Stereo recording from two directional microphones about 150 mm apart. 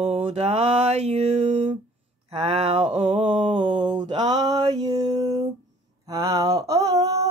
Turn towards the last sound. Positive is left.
turn(degrees=-25)  # may be behind; listen again after turning